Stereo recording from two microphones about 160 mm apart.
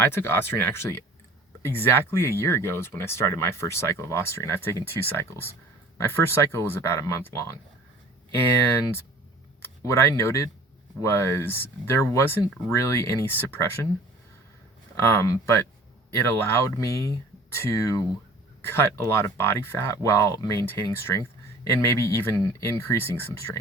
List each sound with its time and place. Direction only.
0.0 s speech: 15° left (ahead or behind)
9.6 s speech: 15° left (ahead or behind)
14.9 s speech: 15° left (ahead or behind)